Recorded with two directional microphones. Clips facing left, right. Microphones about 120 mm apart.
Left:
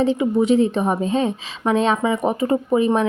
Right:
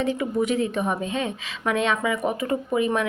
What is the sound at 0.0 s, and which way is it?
Speech, 25° left (ahead or behind).